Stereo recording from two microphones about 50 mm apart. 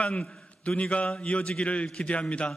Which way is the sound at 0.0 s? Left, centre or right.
Left.